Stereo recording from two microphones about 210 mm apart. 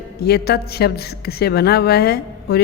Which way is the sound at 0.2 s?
50° left (ahead or behind).